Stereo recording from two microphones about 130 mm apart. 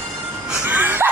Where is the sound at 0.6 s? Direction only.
15° right (ahead or behind).